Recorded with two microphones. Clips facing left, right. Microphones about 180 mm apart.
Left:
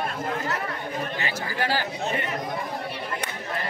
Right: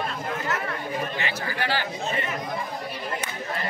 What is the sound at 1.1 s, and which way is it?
Chatter, 40° left (ahead or behind).